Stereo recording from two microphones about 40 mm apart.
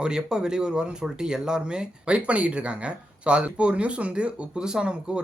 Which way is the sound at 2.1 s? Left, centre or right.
Right.